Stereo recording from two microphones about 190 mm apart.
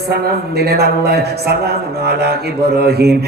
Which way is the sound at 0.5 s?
55° right (ahead or behind).